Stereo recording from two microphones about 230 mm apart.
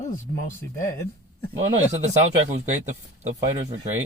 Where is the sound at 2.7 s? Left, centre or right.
Right.